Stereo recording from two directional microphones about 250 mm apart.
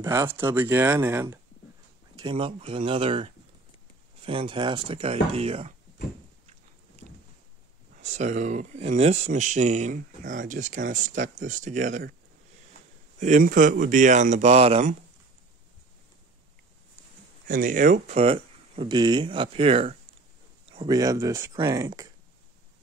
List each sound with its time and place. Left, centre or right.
0.0 s speech: centre
2.1 s speech: right
7.0 s a sound: left
8.0 s speech: right
13.2 s speech: right
17.5 s speech: right; by 22.0 s centre